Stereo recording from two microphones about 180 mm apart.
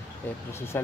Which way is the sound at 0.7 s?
15° left (ahead or behind).